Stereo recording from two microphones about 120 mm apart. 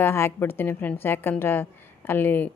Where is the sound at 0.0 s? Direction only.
20° left (ahead or behind).